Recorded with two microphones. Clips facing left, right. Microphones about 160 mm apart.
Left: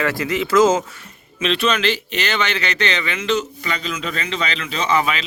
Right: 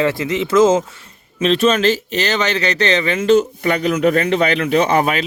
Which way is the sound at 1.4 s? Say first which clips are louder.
Right 5 dB; 40° right (ahead or behind).